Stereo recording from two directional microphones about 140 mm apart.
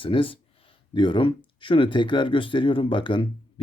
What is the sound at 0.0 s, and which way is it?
Speech, 40° left (ahead or behind).